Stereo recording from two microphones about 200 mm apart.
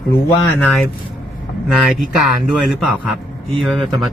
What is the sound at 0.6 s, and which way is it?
Speech, centre (ahead or behind).